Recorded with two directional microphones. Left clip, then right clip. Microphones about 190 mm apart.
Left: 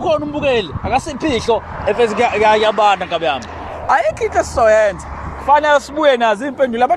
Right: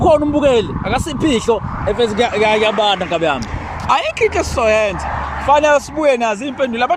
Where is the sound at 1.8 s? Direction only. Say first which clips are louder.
Left 1 dB; 20° right (ahead or behind).